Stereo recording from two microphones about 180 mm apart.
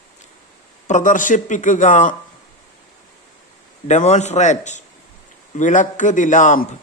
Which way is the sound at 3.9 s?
40° left (ahead or behind).